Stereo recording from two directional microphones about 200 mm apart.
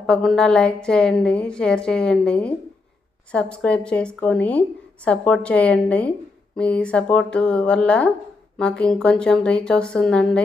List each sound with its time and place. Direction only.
0.0 s a woman's voice: 5° left (ahead or behind)